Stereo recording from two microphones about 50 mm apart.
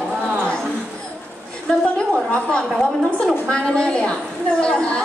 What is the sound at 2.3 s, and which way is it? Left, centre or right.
Speech, left.